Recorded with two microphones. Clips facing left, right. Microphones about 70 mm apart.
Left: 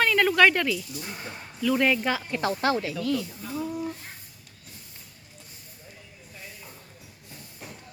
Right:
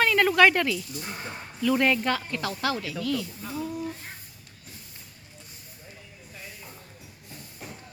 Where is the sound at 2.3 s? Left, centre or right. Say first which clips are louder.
Left 4 dB; left.